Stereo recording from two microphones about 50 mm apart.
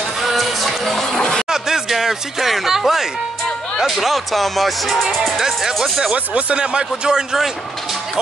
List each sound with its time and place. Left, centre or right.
0.2 s music: centre
1.5 s music: centre
3.7 s speech: centre
6.1 s speech: right